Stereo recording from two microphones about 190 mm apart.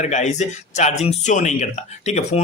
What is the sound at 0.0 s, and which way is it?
Speech, 40° left (ahead or behind).